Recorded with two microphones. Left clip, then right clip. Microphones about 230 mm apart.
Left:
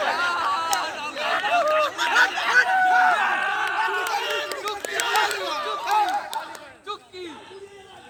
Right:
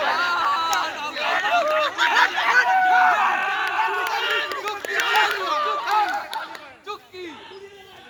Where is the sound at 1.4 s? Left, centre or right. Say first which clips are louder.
Left 1 dB; centre.